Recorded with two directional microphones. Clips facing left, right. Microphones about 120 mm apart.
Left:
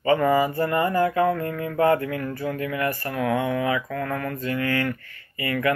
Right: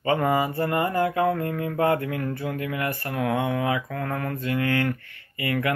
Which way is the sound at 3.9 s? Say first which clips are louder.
Left 1 dB; 25° right (ahead or behind).